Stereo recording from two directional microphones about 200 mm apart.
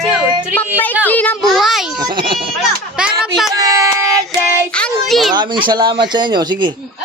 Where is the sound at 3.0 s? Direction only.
5° right (ahead or behind).